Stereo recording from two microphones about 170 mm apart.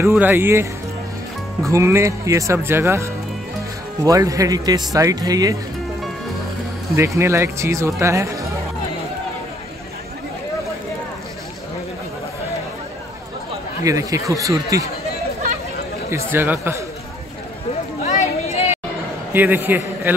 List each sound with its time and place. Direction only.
0.0 s speech: 10° right (ahead or behind)
7.2 s speech: 15° right (ahead or behind)
13.8 s speech: 20° right (ahead or behind)
16.1 s speech: 15° right (ahead or behind)
18.0 s a sound: 45° left (ahead or behind)
19.3 s a man's voice: 10° right (ahead or behind)